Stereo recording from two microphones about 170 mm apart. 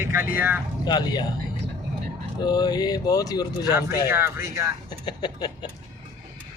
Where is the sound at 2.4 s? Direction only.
25° left (ahead or behind).